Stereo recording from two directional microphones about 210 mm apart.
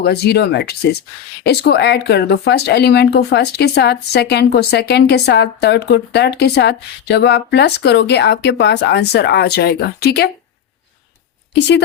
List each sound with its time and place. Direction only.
0.0 s speech: 50° left (ahead or behind)